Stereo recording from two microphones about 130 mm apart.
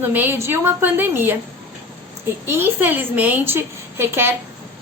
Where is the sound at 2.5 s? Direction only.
15° right (ahead or behind).